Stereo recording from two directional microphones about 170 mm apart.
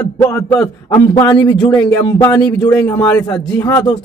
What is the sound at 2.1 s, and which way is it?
Speech, 20° left (ahead or behind).